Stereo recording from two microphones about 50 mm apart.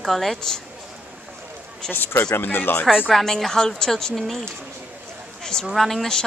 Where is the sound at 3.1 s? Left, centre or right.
Centre.